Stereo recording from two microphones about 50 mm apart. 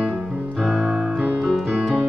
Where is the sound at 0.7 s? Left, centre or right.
Centre.